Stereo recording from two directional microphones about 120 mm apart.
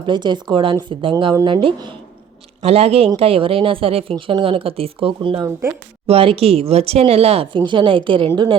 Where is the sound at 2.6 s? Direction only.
60° right (ahead or behind).